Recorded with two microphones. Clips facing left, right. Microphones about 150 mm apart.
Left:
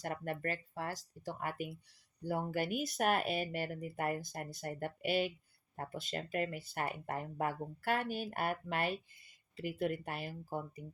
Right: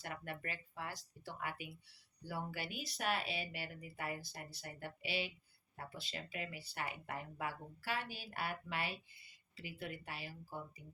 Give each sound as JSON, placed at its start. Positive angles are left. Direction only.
{"t": 0.0, "sound": "speech", "side_deg": 45}